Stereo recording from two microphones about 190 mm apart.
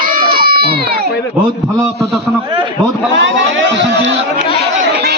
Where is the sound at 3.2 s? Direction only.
75° right (ahead or behind).